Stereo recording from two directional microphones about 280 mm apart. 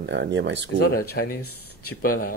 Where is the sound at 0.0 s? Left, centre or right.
Right.